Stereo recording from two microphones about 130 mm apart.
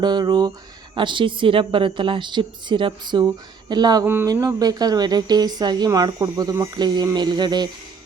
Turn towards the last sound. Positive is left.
turn(degrees=-35)  # may be behind; listen again after turning